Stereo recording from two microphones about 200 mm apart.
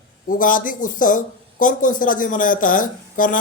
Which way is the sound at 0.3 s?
45° left (ahead or behind).